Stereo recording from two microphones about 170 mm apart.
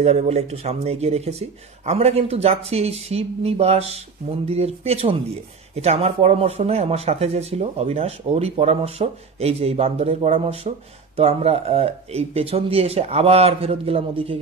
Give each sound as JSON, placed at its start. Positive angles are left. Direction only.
{"t": 0.0, "sound": "speech", "side_deg": -40}